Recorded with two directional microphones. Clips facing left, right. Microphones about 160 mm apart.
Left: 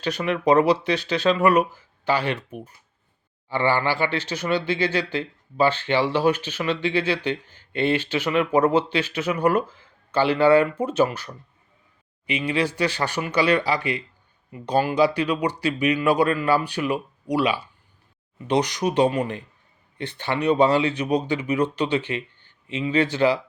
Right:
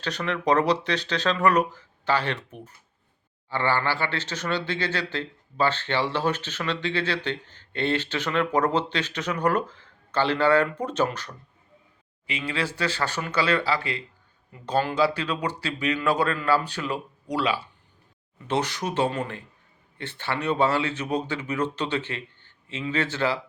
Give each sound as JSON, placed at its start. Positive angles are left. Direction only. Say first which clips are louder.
{"t": 0.0, "sound": "speech", "louder": "left 4 dB", "side_deg": 10}